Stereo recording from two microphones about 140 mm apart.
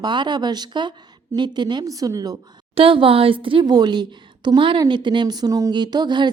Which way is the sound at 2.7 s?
40° right (ahead or behind).